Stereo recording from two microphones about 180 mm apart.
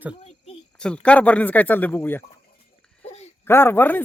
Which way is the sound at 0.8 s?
5° left (ahead or behind).